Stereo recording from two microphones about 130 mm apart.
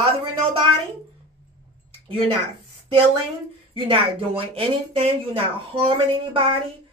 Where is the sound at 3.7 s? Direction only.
45° right (ahead or behind).